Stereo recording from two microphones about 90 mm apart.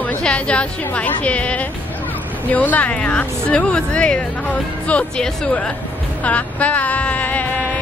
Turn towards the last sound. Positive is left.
turn(degrees=15)  # may be behind; listen again after turning